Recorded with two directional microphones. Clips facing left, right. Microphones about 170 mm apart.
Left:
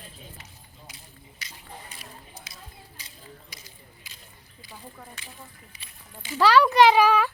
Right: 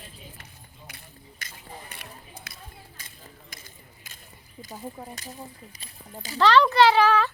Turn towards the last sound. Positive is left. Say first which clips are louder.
# left 1 dB
turn(degrees=10)  # may be behind; listen again after turning